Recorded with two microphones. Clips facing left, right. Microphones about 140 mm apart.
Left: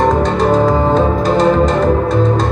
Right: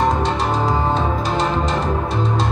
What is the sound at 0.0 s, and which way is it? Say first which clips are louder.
Music: left 6 dB; 45° left (ahead or behind).